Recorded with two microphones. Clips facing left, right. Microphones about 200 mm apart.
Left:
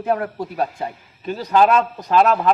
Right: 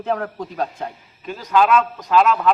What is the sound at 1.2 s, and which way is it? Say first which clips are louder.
A man's voice: left 2 dB; 35° left (ahead or behind).